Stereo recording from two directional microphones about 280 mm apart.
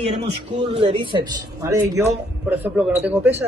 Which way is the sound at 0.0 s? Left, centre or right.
Right.